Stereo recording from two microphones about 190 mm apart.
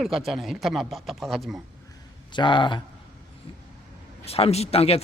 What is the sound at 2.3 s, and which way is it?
Speech, 25° left (ahead or behind).